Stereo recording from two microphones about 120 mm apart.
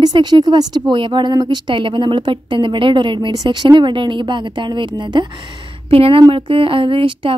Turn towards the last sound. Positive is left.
turn(degrees=-45)  # may be behind; listen again after turning